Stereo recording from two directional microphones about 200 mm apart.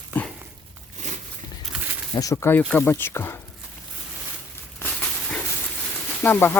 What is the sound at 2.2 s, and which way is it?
Speech, 15° left (ahead or behind).